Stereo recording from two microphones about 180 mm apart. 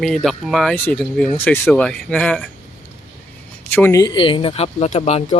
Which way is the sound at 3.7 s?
15° left (ahead or behind).